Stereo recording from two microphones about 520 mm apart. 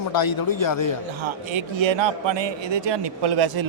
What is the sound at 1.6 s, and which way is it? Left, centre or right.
A man's voice, right.